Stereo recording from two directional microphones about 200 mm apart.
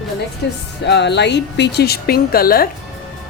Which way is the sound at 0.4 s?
55° left (ahead or behind).